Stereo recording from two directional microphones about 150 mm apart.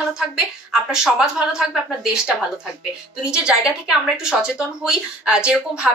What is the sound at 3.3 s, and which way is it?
Speech, 5° right (ahead or behind).